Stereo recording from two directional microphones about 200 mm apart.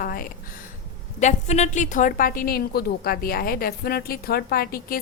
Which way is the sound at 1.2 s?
35° left (ahead or behind).